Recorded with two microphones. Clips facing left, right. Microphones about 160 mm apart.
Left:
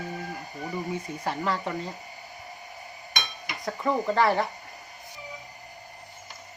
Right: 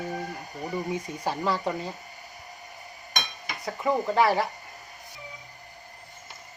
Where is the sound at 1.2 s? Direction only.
10° right (ahead or behind).